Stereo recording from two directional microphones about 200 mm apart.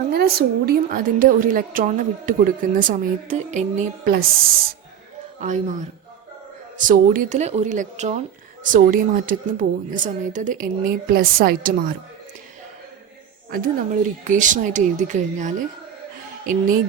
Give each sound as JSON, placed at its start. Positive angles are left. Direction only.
{"t": 0.1, "sound": "a woman's voice", "side_deg": -50}
{"t": 5.4, "sound": "speech", "side_deg": -35}
{"t": 6.7, "sound": "a woman's voice", "side_deg": -40}
{"t": 13.5, "sound": "speech", "side_deg": -40}